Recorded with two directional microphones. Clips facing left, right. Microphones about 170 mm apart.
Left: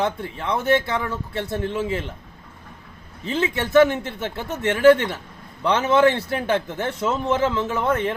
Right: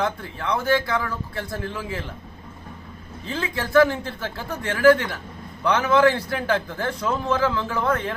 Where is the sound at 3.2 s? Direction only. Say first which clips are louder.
Left 5 dB; 20° left (ahead or behind).